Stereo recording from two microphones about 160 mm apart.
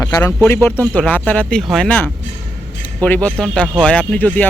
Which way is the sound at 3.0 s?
10° left (ahead or behind).